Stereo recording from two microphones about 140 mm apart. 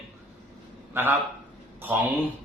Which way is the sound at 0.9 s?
15° right (ahead or behind).